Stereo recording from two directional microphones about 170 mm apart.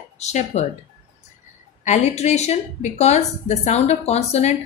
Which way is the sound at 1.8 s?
45° left (ahead or behind).